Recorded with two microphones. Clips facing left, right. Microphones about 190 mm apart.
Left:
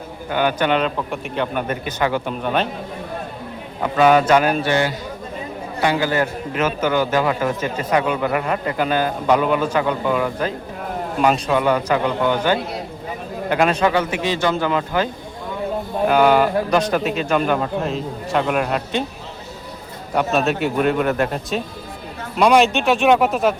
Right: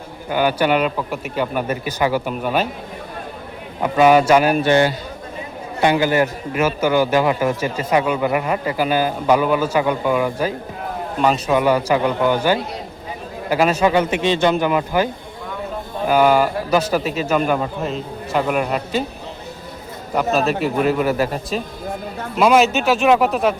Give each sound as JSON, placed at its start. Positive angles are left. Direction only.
{"t": 0.3, "sound": "a man's voice", "side_deg": -10}
{"t": 3.8, "sound": "a man's voice", "side_deg": -10}
{"t": 4.6, "sound": "a man's voice", "side_deg": -30}
{"t": 5.8, "sound": "a man's voice", "side_deg": -15}
{"t": 14.1, "sound": "a man's voice", "side_deg": -25}
{"t": 20.1, "sound": "a man's voice", "side_deg": 0}